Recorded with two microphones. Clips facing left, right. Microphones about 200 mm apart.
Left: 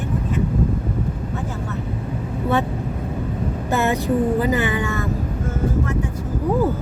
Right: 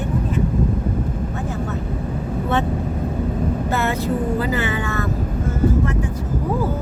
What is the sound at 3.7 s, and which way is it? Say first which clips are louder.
Speech: left 5 dB; 15° left (ahead or behind).